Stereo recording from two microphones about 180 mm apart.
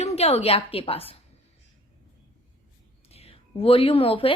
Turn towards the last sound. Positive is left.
turn(degrees=30)  # may be behind; listen again after turning